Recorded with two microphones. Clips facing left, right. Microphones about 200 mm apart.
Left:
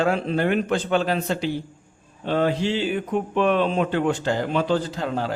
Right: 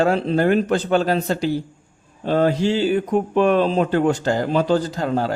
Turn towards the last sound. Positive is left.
turn(degrees=-40)  # may be behind; listen again after turning